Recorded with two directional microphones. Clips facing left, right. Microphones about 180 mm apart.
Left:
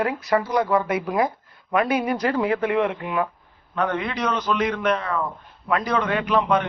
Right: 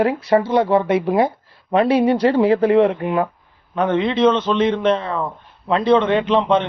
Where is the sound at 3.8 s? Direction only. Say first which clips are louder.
Right 8 dB; 25° right (ahead or behind).